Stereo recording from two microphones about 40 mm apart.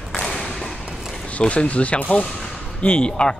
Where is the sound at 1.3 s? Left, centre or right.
Left.